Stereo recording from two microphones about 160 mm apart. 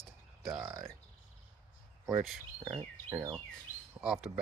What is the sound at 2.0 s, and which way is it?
Speech, centre (ahead or behind).